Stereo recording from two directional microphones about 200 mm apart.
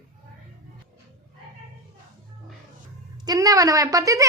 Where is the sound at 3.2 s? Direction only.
20° right (ahead or behind).